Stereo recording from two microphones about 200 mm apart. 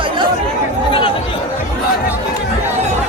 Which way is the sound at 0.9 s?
25° left (ahead or behind).